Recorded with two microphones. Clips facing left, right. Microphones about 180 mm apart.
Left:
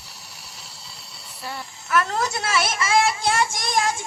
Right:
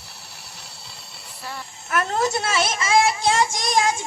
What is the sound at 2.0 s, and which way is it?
A child's voice, 25° right (ahead or behind).